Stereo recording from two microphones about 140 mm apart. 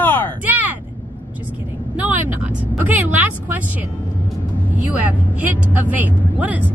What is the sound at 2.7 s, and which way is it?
Speech, 10° right (ahead or behind).